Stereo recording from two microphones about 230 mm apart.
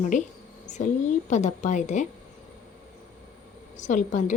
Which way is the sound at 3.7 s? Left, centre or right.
Left.